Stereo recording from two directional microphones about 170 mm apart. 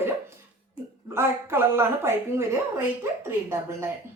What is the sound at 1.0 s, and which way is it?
A woman's voice, 15° right (ahead or behind).